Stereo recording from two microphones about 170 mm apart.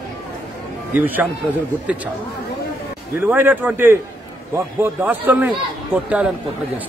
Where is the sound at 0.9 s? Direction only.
10° right (ahead or behind).